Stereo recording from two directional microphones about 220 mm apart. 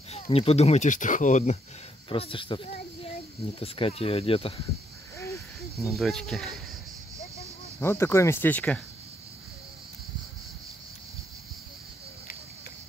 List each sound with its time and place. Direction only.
0.1 s speech: 25° left (ahead or behind)
5.1 s a sound: 15° left (ahead or behind)
5.9 s speech: centre (ahead or behind)
7.8 s speech: 10° left (ahead or behind)